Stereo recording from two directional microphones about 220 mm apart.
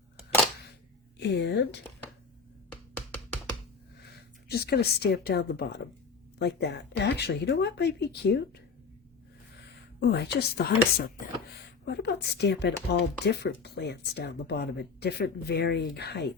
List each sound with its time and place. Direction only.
1.2 s speech: 50° left (ahead or behind)
4.4 s speech: 45° left (ahead or behind)
10.0 s speech: 45° left (ahead or behind)